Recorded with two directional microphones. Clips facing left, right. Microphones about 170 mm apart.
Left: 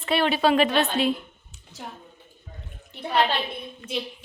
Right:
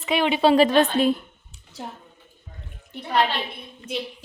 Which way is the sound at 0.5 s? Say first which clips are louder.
Right 4 dB; 35° right (ahead or behind).